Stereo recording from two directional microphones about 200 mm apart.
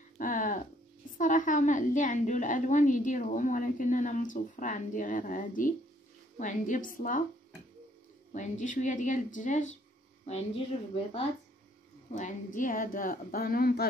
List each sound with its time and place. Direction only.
0.2 s hum: 40° left (ahead or behind)
1.1 s a woman's voice: 40° left (ahead or behind)
8.3 s a woman's voice: 40° left (ahead or behind)
12.1 s a woman's voice: 40° left (ahead or behind)